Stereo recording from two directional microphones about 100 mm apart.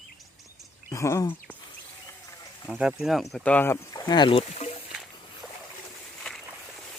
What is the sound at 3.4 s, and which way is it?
Speech, 20° left (ahead or behind).